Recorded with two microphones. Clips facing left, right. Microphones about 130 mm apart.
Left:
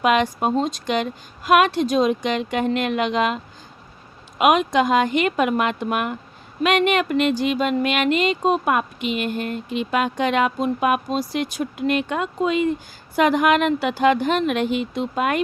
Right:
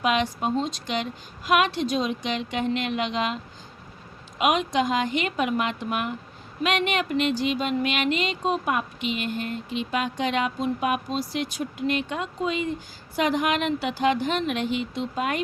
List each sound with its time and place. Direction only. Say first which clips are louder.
0.0 s speech: left 5 dB; 55° left (ahead or behind)